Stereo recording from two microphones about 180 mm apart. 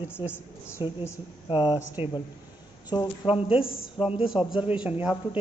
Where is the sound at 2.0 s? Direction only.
10° right (ahead or behind).